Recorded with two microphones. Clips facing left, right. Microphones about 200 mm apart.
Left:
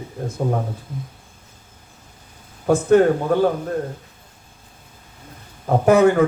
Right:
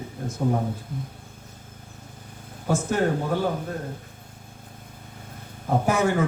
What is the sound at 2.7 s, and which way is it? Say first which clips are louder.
Speech: left 11 dB; 60° left (ahead or behind).